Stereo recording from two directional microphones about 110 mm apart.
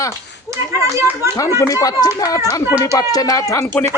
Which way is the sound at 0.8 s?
25° right (ahead or behind).